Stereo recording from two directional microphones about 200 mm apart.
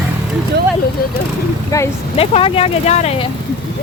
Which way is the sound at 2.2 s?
30° left (ahead or behind).